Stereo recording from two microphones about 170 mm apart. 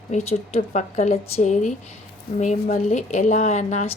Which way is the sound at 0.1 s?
40° left (ahead or behind).